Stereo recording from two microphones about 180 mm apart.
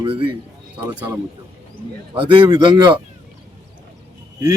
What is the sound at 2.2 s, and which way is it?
Speech, 25° right (ahead or behind).